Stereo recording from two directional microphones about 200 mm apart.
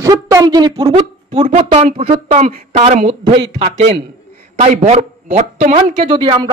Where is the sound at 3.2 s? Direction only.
25° right (ahead or behind).